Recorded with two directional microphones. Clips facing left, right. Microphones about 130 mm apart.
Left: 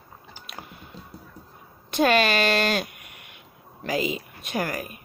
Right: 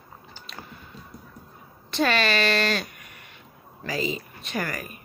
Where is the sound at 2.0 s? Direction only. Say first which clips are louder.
Left 3 dB; 50° left (ahead or behind).